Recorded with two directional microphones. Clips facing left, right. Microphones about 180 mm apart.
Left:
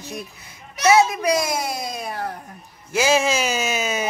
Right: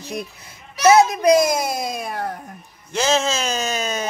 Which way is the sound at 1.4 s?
50° right (ahead or behind).